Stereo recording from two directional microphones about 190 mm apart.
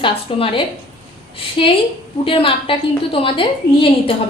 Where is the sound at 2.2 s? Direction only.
30° left (ahead or behind).